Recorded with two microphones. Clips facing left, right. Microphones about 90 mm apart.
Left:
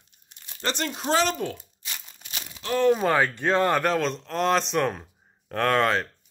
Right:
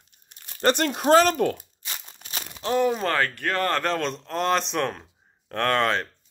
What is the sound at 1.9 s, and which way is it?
Crumpling, 40° right (ahead or behind).